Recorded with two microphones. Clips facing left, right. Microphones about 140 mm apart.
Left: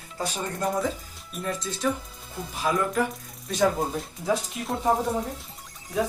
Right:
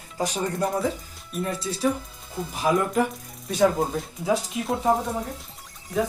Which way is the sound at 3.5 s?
5° right (ahead or behind).